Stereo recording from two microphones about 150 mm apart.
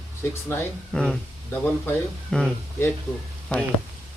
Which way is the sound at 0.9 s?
5° left (ahead or behind).